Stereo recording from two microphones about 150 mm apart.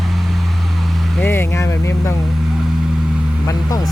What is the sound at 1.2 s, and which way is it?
Speech, 15° left (ahead or behind).